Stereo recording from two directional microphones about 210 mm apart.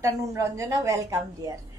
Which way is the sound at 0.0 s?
15° right (ahead or behind).